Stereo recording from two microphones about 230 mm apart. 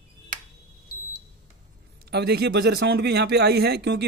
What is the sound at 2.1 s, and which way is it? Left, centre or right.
Speech, right.